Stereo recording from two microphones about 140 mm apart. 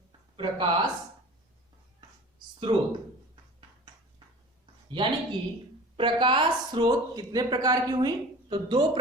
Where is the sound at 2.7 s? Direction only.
30° right (ahead or behind).